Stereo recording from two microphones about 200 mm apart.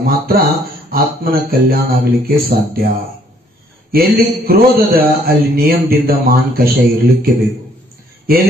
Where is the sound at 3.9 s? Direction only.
50° right (ahead or behind).